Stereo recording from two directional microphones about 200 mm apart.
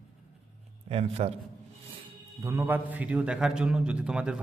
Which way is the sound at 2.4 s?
10° right (ahead or behind).